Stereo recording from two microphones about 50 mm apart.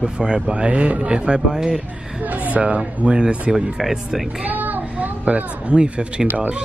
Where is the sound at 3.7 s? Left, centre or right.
Centre.